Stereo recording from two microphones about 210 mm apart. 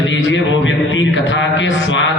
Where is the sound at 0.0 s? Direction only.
60° left (ahead or behind).